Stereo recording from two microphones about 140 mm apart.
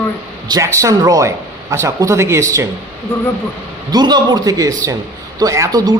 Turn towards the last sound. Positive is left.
turn(degrees=-25)  # may be behind; listen again after turning